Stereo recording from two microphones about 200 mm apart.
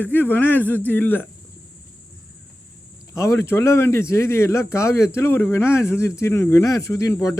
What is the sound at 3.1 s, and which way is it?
Speech, 15° left (ahead or behind).